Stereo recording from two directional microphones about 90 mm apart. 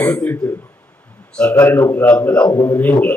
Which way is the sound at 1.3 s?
15° left (ahead or behind).